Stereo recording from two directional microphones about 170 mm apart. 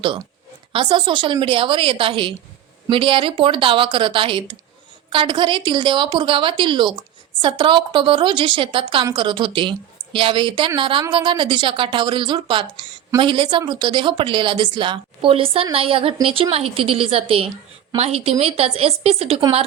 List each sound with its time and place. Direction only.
0.7 s a woman's voice: 30° right (ahead or behind)